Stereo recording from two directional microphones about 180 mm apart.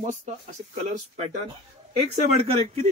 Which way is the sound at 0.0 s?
45° right (ahead or behind).